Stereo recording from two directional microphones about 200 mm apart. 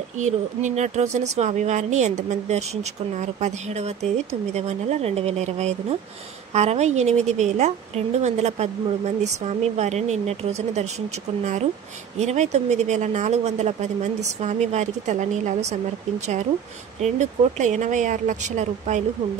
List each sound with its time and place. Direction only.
0.2 s speech: 35° right (ahead or behind)
12.2 s speech: 35° right (ahead or behind)
17.0 s speech: 35° right (ahead or behind)